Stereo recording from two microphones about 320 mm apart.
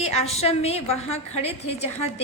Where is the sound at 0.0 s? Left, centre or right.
Centre.